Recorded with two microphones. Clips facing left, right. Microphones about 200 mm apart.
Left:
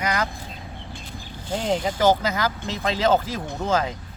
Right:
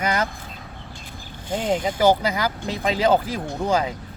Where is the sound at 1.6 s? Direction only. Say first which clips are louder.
Right 1 dB; 10° right (ahead or behind).